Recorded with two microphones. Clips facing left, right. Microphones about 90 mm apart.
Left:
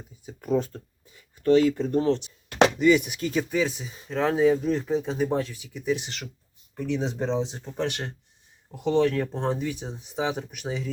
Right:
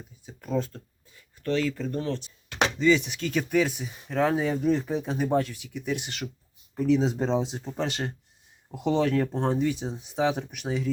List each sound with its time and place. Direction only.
0.3 s a sound: 15° left (ahead or behind)
1.5 s speech: 20° left (ahead or behind)
3.3 s speech: centre (ahead or behind)